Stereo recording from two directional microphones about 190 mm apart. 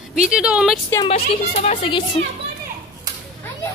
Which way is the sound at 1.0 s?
35° left (ahead or behind).